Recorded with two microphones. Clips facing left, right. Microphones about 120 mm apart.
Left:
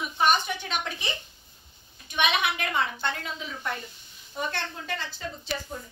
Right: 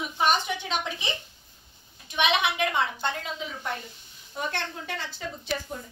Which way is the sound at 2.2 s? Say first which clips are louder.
Right 2 dB; 20° right (ahead or behind).